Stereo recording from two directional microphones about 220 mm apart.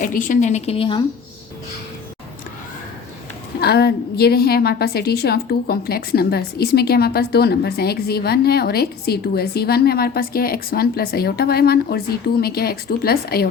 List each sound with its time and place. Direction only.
0.0 s a woman's voice: 35° left (ahead or behind)
3.6 s a woman's voice: 45° left (ahead or behind)